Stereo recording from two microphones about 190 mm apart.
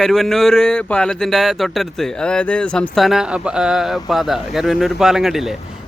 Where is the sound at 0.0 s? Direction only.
Centre (ahead or behind).